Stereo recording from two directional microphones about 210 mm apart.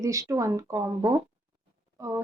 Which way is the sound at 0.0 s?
15° right (ahead or behind).